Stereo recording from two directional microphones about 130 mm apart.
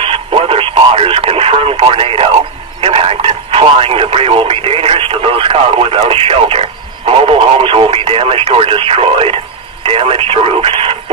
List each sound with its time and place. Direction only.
0.0 s radio: 45° right (ahead or behind)
2.8 s speech: 45° right (ahead or behind)